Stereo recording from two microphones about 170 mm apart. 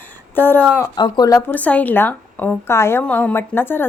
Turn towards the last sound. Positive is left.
turn(degrees=10)  # may be behind; listen again after turning